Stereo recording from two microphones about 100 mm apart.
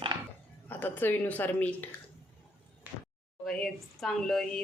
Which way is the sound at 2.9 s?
15° right (ahead or behind).